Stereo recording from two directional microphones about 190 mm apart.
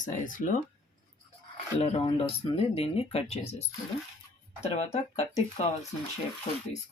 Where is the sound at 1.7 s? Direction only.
35° left (ahead or behind).